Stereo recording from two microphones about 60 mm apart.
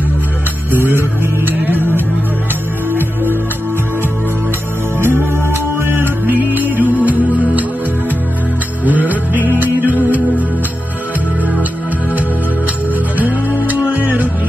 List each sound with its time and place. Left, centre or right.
0.7 s music: right
4.9 s music: right
9.1 s music: right
13.6 s music: right